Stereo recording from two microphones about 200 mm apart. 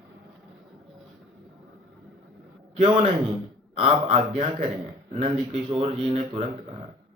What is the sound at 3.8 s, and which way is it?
Speech, 30° right (ahead or behind).